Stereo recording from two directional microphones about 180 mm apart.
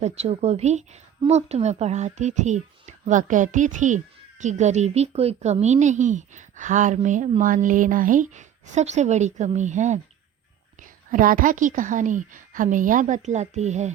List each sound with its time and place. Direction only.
0.0 s speech: 35° right (ahead or behind)
11.1 s a woman's voice: 50° right (ahead or behind)